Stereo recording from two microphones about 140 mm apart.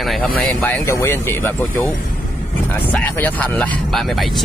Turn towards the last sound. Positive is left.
turn(degrees=0)  # may be behind; listen again after turning